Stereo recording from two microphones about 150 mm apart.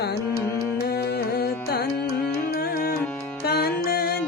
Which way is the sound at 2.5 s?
85° left.